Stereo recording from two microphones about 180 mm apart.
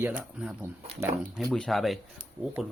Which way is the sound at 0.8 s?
35° right (ahead or behind).